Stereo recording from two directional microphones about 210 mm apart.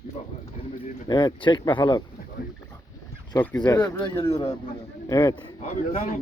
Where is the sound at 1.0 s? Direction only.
20° left (ahead or behind).